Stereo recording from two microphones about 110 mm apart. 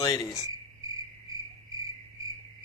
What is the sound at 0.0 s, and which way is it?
Cricket, 35° left (ahead or behind).